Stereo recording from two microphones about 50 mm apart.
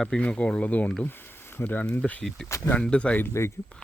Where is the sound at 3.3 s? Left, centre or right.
Left.